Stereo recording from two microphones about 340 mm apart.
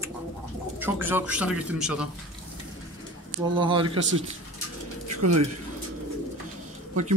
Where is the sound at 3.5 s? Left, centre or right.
Centre.